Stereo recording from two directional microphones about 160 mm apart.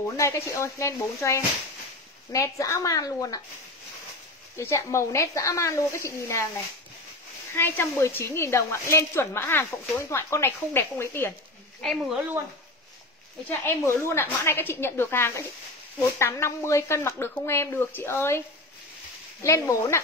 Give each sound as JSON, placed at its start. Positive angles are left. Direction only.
{"t": 0.2, "sound": "speech", "side_deg": 20}
{"t": 4.6, "sound": "a woman's voice", "side_deg": 20}
{"t": 7.5, "sound": "a woman's voice", "side_deg": 15}
{"t": 11.8, "sound": "speech", "side_deg": 0}
{"t": 13.5, "sound": "a woman's voice", "side_deg": 15}
{"t": 19.4, "sound": "speech", "side_deg": 20}